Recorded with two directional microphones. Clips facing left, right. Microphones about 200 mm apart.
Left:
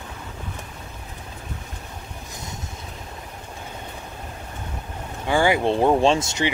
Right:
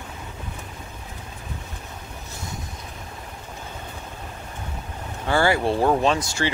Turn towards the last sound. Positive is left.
turn(degrees=25)  # may be behind; listen again after turning